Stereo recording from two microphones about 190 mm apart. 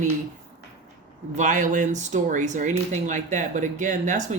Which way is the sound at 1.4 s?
40° right (ahead or behind).